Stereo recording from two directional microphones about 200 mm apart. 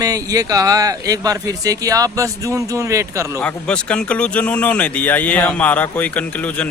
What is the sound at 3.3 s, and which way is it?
Speech, 5° left (ahead or behind).